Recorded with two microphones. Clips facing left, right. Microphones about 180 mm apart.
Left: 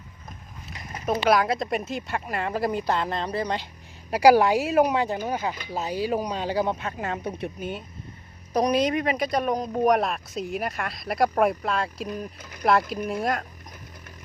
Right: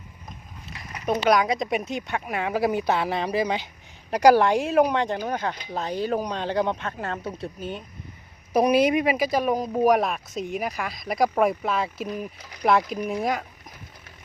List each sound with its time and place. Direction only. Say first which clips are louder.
1.0 s speech: right 1 dB; centre (ahead or behind)
4.1 s speech: even; 10° left (ahead or behind)
8.5 s speech: right 3 dB; 10° right (ahead or behind)
12.4 s speech: left 2 dB; 50° left (ahead or behind)
12.9 s speech: right 1 dB; centre (ahead or behind)